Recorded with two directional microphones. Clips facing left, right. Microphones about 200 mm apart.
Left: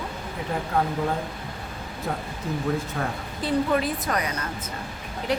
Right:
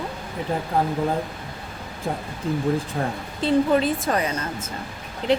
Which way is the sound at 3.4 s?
25° right (ahead or behind).